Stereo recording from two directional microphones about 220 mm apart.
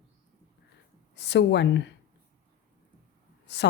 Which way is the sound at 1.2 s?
50° left (ahead or behind).